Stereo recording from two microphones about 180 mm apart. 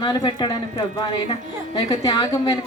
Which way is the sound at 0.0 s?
25° left (ahead or behind).